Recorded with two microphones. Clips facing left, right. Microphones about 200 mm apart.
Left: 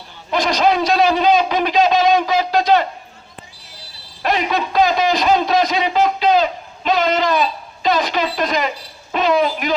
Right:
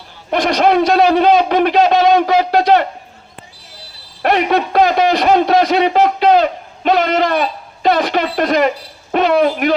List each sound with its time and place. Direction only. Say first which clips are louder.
0.3 s a man's voice: right 3 dB; 60° right (ahead or behind)
4.2 s a man's voice: right 5 dB; 65° right (ahead or behind)